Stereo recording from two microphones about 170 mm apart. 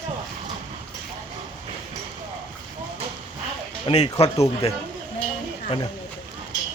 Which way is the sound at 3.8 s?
35° left (ahead or behind).